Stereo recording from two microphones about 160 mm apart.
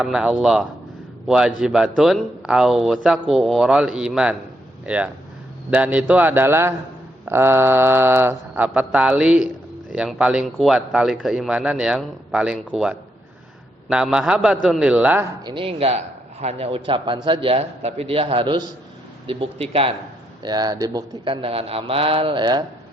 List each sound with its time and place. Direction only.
0.0 s a man's voice: 5° right (ahead or behind)
4.9 s mantra: 10° right (ahead or behind)
9.9 s a man's voice: 5° right (ahead or behind)
15.4 s a man's voice: 35° right (ahead or behind)
21.2 s a man's voice: 35° right (ahead or behind)